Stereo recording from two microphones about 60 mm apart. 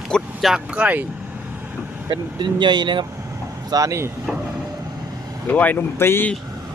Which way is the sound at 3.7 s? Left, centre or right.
Right.